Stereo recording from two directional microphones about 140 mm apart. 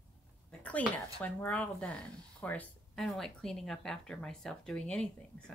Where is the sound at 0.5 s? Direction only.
10° left (ahead or behind).